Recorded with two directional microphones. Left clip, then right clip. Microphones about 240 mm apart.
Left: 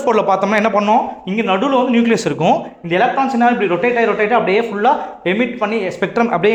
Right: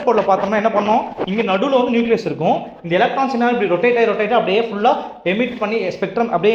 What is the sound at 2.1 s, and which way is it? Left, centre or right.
Speech, left.